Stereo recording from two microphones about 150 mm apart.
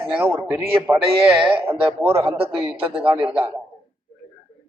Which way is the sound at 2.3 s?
35° right (ahead or behind).